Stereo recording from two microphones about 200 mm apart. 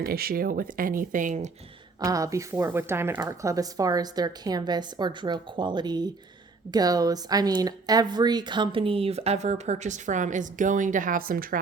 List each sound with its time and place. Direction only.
0.0 s speech: 50° right (ahead or behind)
2.0 s a woman's voice: 15° right (ahead or behind); by 11.4 s 45° right (ahead or behind)